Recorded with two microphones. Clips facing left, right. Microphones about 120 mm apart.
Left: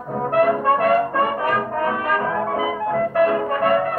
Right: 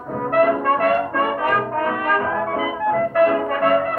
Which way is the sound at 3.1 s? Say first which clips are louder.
Right 1 dB; 45° right (ahead or behind).